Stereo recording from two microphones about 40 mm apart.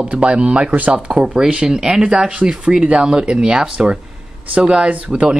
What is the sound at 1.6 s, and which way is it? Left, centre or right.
Speech, centre.